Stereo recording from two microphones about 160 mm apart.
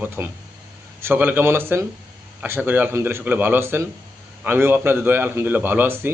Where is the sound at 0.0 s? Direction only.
15° right (ahead or behind).